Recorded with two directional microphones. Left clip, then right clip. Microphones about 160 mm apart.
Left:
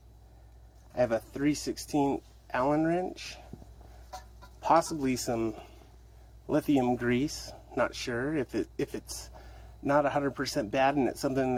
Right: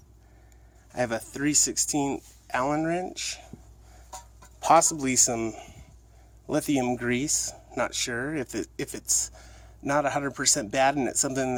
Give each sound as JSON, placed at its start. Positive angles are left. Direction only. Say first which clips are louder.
{"t": 0.9, "sound": "speech", "louder": "even", "side_deg": -15}
{"t": 4.6, "sound": "a man's voice", "louder": "right 5 dB", "side_deg": -25}